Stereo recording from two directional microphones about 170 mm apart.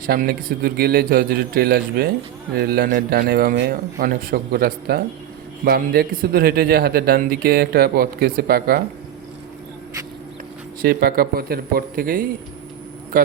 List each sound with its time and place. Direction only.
0.0 s a man's voice: 55° right (ahead or behind)
10.8 s a man's voice: 60° right (ahead or behind)